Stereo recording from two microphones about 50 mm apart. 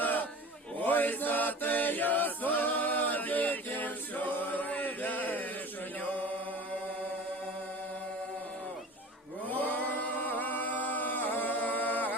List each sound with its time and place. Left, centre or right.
0.0 s a sound: left
0.8 s chant: left
6.0 s mantra: left
9.5 s a capella: left